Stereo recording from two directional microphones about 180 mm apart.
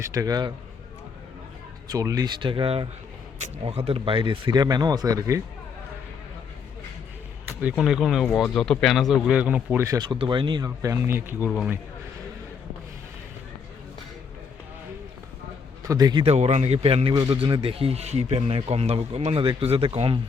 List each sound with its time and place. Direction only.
0.0 s speech: 20° right (ahead or behind)
1.9 s speech: 20° right (ahead or behind)
7.6 s speech: centre (ahead or behind)
15.9 s speech: 20° right (ahead or behind)
16.2 s a man's voice: 35° right (ahead or behind)